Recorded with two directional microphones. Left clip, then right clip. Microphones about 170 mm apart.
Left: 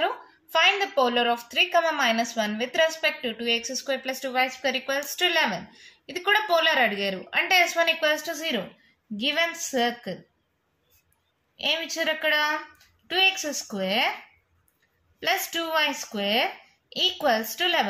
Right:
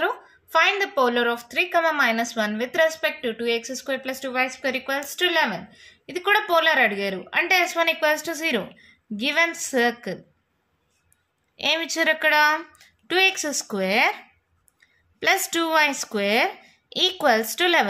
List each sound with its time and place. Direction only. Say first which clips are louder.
0.0 s a woman's voice: right 2 dB; 40° right (ahead or behind)
11.5 s a woman's voice: right 3 dB; 50° right (ahead or behind)
15.1 s a woman's voice: right 5 dB; 50° right (ahead or behind)